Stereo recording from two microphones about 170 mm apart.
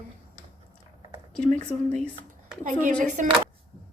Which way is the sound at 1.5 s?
5° left (ahead or behind).